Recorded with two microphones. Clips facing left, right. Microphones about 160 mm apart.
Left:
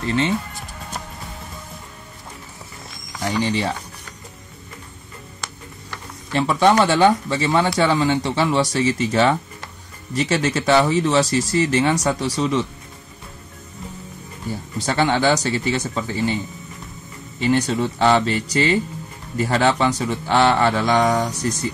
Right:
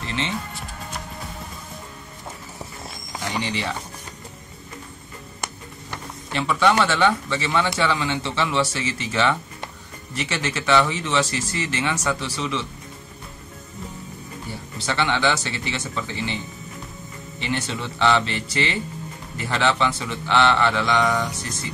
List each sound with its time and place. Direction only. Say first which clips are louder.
0.0 s speech: left 7 dB; 40° left (ahead or behind)
3.4 s speech: left 5 dB; 35° left (ahead or behind)
6.3 s speech: left 4 dB; 35° left (ahead or behind)
14.9 s speech: left 4 dB; 40° left (ahead or behind)
17.4 s speech: left 9 dB; 40° left (ahead or behind)